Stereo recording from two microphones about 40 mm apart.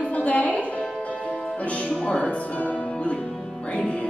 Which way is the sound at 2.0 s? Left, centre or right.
Left.